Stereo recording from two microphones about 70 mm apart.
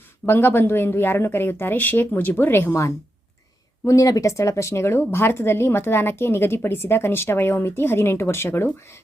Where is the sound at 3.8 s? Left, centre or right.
Left.